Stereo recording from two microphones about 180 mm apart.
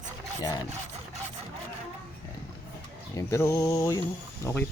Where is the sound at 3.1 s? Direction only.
15° left (ahead or behind).